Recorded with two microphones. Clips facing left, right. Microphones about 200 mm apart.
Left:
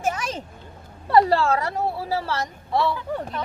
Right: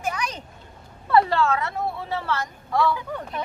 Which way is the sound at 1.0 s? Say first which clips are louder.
Left 2 dB; 35° left (ahead or behind).